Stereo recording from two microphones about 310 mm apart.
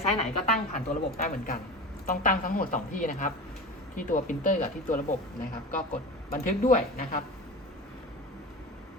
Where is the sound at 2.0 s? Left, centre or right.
Left.